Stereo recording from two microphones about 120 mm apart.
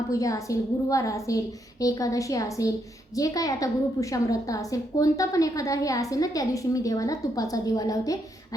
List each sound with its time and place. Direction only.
0.1 s a woman's voice: 30° left (ahead or behind)